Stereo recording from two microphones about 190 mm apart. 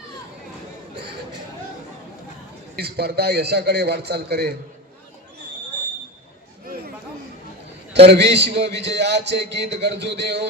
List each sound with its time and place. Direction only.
2.7 s a man's voice: 60° right (ahead or behind)
8.0 s a man's voice: 60° right (ahead or behind)